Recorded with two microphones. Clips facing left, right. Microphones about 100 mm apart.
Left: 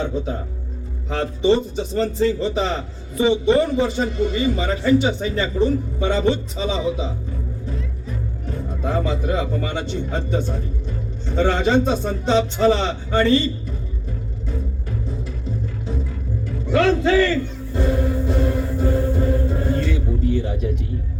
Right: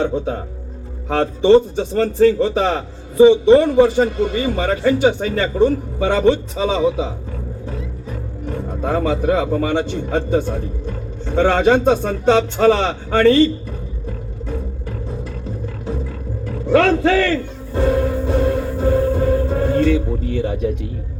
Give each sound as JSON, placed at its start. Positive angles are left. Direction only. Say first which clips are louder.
{"t": 1.1, "sound": "a man's voice", "louder": "right 6 dB", "side_deg": -75}
{"t": 8.8, "sound": "a man's voice", "louder": "right 4 dB", "side_deg": -55}
{"t": 16.7, "sound": "music", "louder": "right 3 dB", "side_deg": -85}